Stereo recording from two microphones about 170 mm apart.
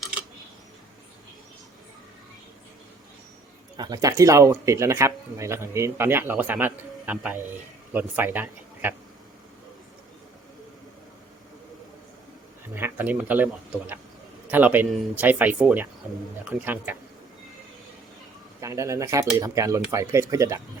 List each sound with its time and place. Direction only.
3.8 s speech: 20° right (ahead or behind)
12.7 s speech: 10° right (ahead or behind)
18.6 s speech: 20° right (ahead or behind)